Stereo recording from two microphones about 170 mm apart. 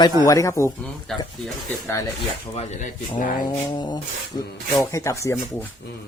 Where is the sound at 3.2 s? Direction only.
50° left (ahead or behind).